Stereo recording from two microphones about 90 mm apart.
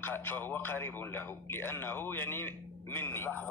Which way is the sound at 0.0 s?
20° left (ahead or behind).